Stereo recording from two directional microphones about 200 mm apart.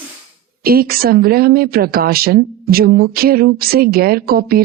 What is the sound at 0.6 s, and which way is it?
A woman's voice, 50° right (ahead or behind).